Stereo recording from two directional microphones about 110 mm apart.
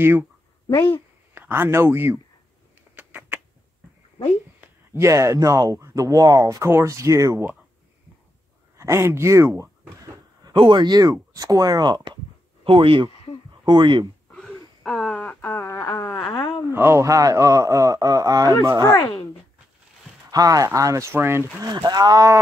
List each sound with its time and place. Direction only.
0.0 s speech: 20° right (ahead or behind)
0.7 s a sound: 20° left (ahead or behind)
1.3 s speech: 20° right (ahead or behind)
3.0 s a sound: 15° right (ahead or behind)
4.9 s speech: 25° right (ahead or behind)
8.7 s speech: 25° right (ahead or behind)
10.4 s speech: 50° right (ahead or behind)
12.6 s speech: 50° right (ahead or behind)
14.3 s wheeze: 5° left (ahead or behind)
15.4 s a sound: 25° left (ahead or behind)
16.7 s speech: 25° right (ahead or behind)
20.2 s speech: 35° right (ahead or behind)
21.6 s speech: 40° right (ahead or behind)